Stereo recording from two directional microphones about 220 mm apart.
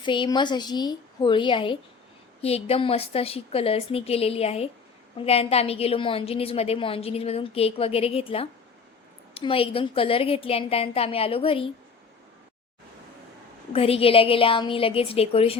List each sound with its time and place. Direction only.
0.0 s a woman's voice: 20° left (ahead or behind)
13.7 s a woman's voice: 25° left (ahead or behind)